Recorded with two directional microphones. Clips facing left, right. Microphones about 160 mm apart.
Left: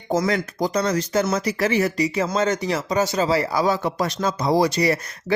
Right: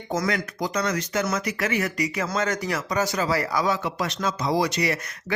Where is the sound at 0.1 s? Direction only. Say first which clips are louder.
Left 5 dB; 30° left (ahead or behind).